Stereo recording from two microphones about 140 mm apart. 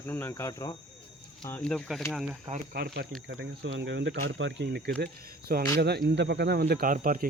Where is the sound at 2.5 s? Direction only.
45° right (ahead or behind).